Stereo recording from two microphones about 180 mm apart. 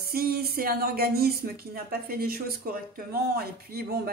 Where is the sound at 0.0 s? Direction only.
60° right (ahead or behind).